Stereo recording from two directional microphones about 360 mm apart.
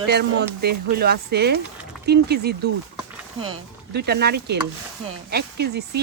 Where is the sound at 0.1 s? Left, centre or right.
Right.